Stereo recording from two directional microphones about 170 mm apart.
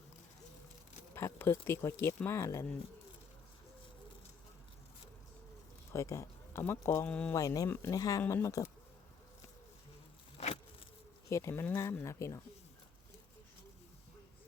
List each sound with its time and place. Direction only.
1.1 s speech: 15° left (ahead or behind)
5.9 s speech: 15° left (ahead or behind)
7.3 s speech: 20° left (ahead or behind)
10.3 s vehicle: 35° left (ahead or behind)
11.3 s speech: 15° left (ahead or behind)